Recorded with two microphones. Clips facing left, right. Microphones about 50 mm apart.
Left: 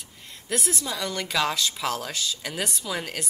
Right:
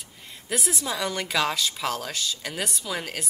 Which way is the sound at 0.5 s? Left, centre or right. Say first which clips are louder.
Even; centre.